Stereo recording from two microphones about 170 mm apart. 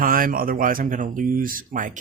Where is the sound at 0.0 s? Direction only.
55° right (ahead or behind).